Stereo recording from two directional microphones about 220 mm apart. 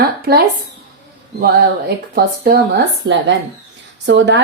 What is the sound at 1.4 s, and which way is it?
A woman's voice, 45° right (ahead or behind).